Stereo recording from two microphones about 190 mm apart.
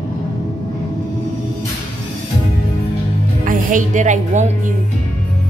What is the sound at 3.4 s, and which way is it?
Music, 45° right (ahead or behind).